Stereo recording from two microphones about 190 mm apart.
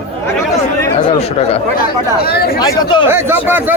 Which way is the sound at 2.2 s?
55° left (ahead or behind).